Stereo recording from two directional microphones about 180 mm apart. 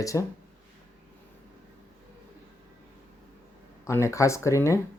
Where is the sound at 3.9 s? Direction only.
15° left (ahead or behind).